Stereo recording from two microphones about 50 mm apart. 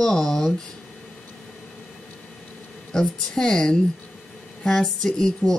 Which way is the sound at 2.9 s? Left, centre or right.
Centre.